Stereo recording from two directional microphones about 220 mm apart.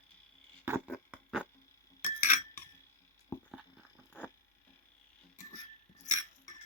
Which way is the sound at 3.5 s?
5° right (ahead or behind).